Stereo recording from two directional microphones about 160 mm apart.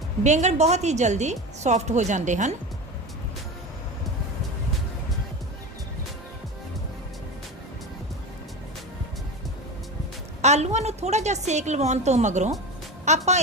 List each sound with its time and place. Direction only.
0.2 s a woman's voice: 45° right (ahead or behind)
10.4 s a woman's voice: 45° right (ahead or behind)